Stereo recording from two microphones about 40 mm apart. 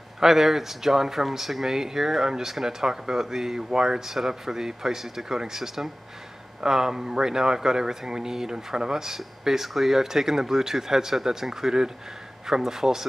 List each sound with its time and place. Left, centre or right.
0.2 s speech: centre